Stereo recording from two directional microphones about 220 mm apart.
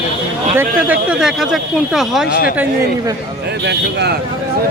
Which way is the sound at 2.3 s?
40° left (ahead or behind).